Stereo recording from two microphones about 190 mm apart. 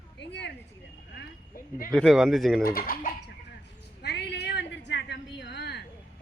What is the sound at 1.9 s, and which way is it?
Speech, 5° left (ahead or behind).